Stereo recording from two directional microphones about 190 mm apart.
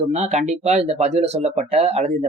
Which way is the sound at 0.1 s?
35° right (ahead or behind).